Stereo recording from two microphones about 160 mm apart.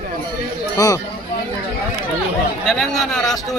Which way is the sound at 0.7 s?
20° left (ahead or behind).